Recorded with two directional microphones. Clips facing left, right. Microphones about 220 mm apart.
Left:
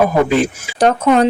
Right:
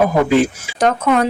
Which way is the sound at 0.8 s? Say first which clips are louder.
Left 3 dB; 30° left (ahead or behind).